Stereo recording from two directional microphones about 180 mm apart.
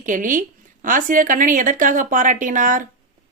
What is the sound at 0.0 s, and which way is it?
A woman's voice, 45° right (ahead or behind).